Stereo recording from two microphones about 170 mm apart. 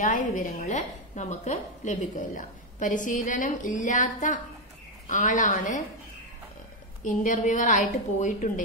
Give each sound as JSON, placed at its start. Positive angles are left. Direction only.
{"t": 0.0, "sound": "speech", "side_deg": 50}
{"t": 7.0, "sound": "speech", "side_deg": 50}